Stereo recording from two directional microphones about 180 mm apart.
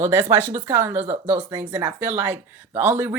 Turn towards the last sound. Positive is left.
turn(degrees=-10)  # may be behind; listen again after turning